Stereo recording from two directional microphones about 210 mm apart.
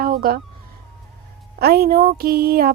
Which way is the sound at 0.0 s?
45° right (ahead or behind).